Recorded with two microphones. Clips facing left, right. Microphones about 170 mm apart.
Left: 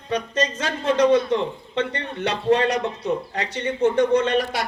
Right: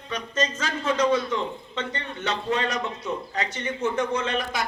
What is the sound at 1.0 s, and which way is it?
Speech, 65° left (ahead or behind).